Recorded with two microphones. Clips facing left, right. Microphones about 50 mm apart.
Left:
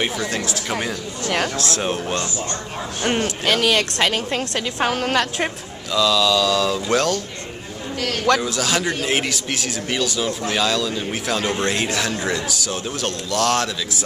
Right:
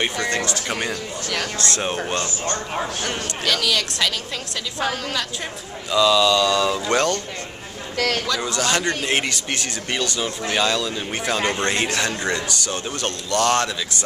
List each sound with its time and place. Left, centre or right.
0.0 s a man's voice: centre
1.2 s a woman's voice: left
1.6 s a man's voice: centre
3.1 s a woman's voice: left
5.9 s a man's voice: centre
8.4 s a man's voice: centre